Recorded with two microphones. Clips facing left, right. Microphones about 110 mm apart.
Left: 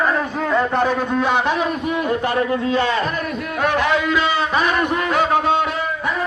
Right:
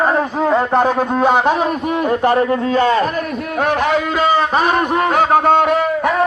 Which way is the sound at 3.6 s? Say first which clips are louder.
Right 2 dB; 45° right (ahead or behind).